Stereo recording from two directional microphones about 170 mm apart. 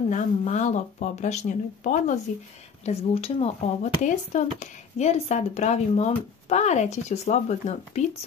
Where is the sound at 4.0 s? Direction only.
45° left (ahead or behind).